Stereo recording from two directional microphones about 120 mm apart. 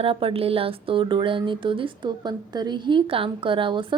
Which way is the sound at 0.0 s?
50° right (ahead or behind).